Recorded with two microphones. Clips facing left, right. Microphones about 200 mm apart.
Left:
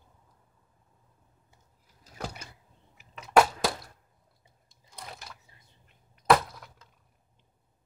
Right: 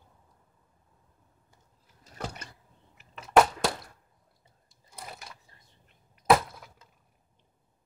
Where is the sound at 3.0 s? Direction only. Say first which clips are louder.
Right 1 dB; centre (ahead or behind).